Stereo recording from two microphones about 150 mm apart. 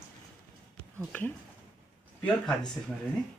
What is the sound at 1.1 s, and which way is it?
Speech, 10° left (ahead or behind).